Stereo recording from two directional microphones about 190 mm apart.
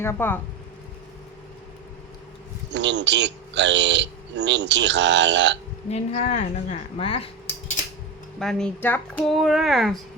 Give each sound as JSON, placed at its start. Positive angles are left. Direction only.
{"t": 0.0, "sound": "speech", "side_deg": 10}
{"t": 2.7, "sound": "a man's voice", "side_deg": -65}
{"t": 5.9, "sound": "a woman's voice", "side_deg": 30}
{"t": 8.4, "sound": "speech", "side_deg": 5}